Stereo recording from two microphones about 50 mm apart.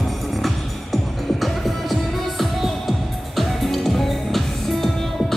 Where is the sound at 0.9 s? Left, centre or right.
Centre.